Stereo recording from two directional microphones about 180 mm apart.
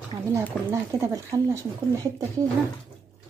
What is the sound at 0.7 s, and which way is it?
Speech, 15° right (ahead or behind).